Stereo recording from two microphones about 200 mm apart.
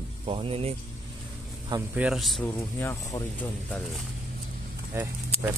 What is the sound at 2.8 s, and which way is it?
Speech, 15° left (ahead or behind).